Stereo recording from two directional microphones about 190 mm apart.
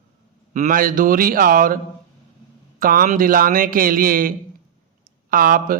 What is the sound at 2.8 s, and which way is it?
A man's voice, 45° right (ahead or behind).